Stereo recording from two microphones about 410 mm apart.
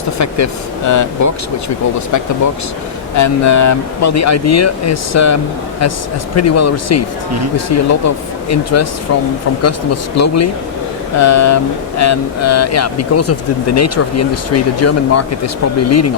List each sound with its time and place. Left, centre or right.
0.2 s speech: left
3.2 s speech: left